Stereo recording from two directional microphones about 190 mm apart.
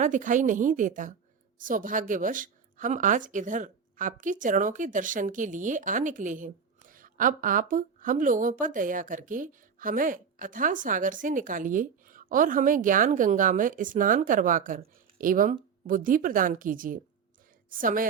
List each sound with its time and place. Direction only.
0.0 s a woman's voice: 40° right (ahead or behind)